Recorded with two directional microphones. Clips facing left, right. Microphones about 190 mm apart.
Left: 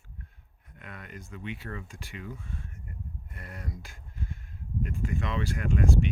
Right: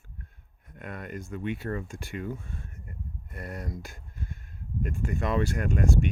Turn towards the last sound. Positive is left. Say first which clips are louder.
# right 3 dB
turn(degrees=-45)  # may be behind; listen again after turning